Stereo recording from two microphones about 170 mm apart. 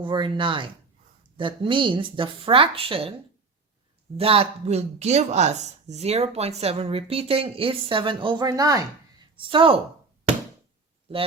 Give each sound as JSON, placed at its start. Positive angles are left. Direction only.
{"t": 0.0, "sound": "a woman's voice", "side_deg": -30}
{"t": 4.2, "sound": "speech", "side_deg": -35}